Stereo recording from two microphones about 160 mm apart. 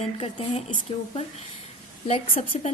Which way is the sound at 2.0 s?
40° left (ahead or behind).